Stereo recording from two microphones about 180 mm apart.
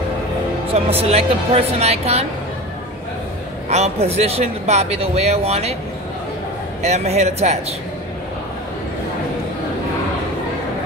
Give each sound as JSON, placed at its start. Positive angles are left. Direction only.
{"t": 0.7, "sound": "speech", "side_deg": -35}
{"t": 3.6, "sound": "speech", "side_deg": -35}
{"t": 6.8, "sound": "speech", "side_deg": -40}